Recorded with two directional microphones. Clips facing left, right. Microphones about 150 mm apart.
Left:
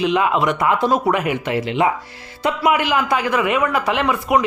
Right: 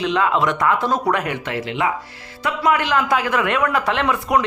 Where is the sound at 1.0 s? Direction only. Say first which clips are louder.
Left 2 dB; 5° left (ahead or behind).